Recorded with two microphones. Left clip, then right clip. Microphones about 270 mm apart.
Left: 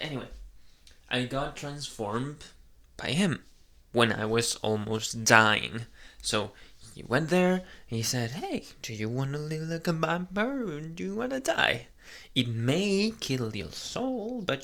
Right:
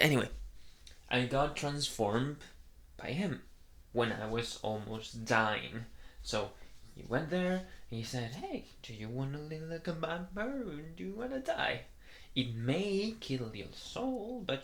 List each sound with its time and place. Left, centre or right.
0.0 s speech: right
1.0 s speech: centre
2.9 s speech: left
3.9 s speech: left
7.3 s speech: left